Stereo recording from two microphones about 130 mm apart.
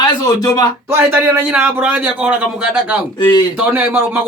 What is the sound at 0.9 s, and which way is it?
A man's voice, 15° right (ahead or behind).